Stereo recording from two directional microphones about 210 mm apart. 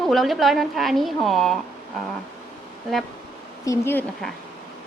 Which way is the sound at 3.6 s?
15° left (ahead or behind).